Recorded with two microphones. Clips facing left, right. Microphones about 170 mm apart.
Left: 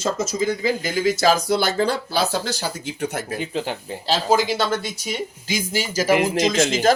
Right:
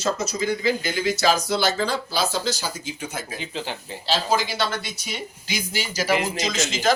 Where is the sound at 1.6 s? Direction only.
55° left (ahead or behind).